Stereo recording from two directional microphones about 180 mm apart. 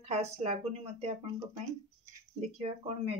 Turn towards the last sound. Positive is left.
turn(degrees=-35)  # may be behind; listen again after turning